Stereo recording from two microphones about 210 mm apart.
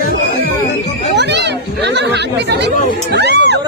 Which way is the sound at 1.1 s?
55° right (ahead or behind).